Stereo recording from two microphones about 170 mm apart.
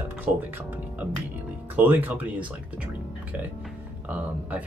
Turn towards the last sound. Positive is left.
turn(degrees=-10)  # may be behind; listen again after turning